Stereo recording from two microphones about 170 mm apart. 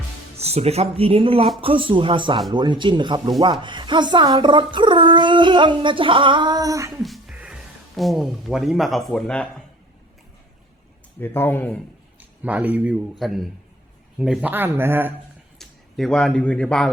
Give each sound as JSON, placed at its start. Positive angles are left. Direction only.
{"t": 0.3, "sound": "speech", "side_deg": -35}
{"t": 7.0, "sound": "speech", "side_deg": 0}
{"t": 11.2, "sound": "speech", "side_deg": 10}
{"t": 12.4, "sound": "speech", "side_deg": -10}
{"t": 15.5, "sound": "speech", "side_deg": 5}